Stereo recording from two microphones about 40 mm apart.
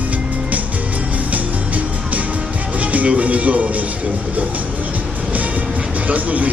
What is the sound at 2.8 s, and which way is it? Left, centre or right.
Speech, right.